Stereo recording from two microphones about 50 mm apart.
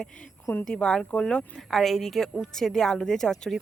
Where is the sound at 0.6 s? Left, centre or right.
Centre.